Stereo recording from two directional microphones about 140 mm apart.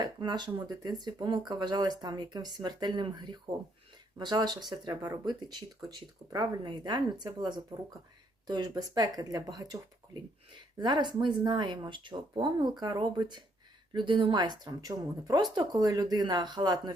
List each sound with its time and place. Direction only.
0.0 s speech: 30° right (ahead or behind)
10.8 s speech: 30° right (ahead or behind)